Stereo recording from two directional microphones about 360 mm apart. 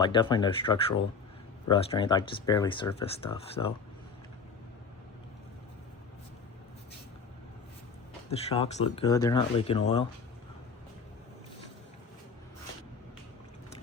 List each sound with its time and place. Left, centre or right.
0.0 s speech: centre
8.3 s speech: centre